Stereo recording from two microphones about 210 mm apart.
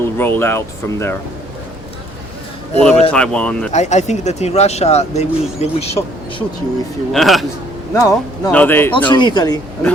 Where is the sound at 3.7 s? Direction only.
35° left (ahead or behind).